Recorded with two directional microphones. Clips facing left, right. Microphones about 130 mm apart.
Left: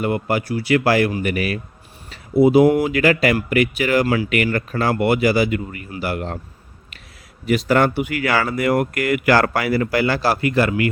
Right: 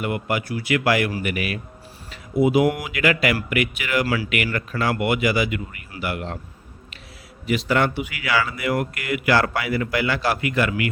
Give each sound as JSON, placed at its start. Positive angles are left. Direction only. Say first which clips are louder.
{"t": 0.0, "sound": "a man's voice", "louder": "left 4 dB", "side_deg": 35}
{"t": 4.0, "sound": "speech", "louder": "left 4 dB", "side_deg": 25}
{"t": 4.5, "sound": "a man's voice", "louder": "left 4 dB", "side_deg": 35}
{"t": 7.4, "sound": "speech", "louder": "left 4 dB", "side_deg": 45}